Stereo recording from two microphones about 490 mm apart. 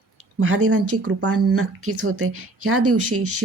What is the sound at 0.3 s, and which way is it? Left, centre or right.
A woman's voice, right.